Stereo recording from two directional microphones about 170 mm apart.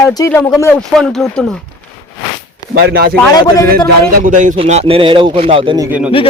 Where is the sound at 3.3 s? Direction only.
20° left (ahead or behind).